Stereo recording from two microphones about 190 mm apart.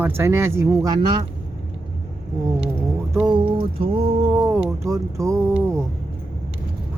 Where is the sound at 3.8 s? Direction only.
25° right (ahead or behind).